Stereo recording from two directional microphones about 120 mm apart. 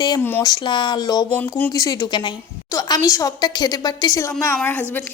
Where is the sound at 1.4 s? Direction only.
15° left (ahead or behind).